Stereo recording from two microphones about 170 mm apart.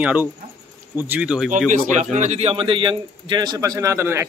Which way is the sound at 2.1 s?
40° right (ahead or behind).